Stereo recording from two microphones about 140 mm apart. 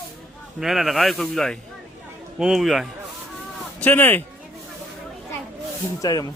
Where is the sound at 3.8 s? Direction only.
10° left (ahead or behind).